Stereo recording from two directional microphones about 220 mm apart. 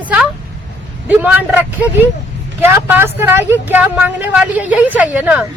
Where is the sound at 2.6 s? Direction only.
10° right (ahead or behind).